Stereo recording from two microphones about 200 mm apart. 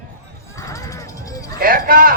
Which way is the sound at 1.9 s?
45° right (ahead or behind).